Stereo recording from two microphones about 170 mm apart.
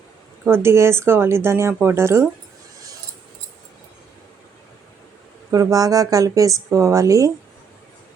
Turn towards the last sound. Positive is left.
turn(degrees=-20)  # may be behind; listen again after turning